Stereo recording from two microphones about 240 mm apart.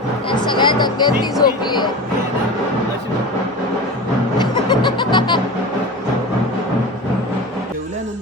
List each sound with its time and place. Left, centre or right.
0.3 s speech: centre
4.4 s music: centre